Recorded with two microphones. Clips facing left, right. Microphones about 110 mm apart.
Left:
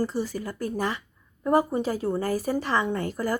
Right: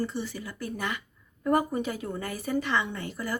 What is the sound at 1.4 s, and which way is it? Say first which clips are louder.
A woman's voice: left 3 dB; 25° left (ahead or behind).